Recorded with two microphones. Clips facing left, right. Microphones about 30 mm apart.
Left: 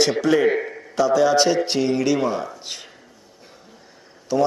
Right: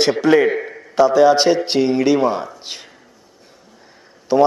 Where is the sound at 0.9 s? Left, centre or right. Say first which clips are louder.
Right 5 dB; right.